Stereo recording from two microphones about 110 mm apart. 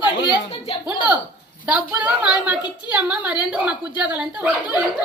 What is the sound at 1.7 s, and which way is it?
Speech, 10° right (ahead or behind).